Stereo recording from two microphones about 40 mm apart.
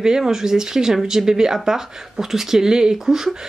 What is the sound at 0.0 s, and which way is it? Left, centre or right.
Speech, centre.